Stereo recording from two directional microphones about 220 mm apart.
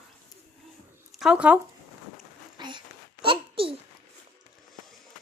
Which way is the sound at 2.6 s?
20° right (ahead or behind).